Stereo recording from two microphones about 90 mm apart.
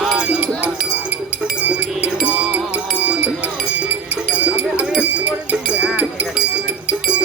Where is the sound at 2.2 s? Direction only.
10° right (ahead or behind).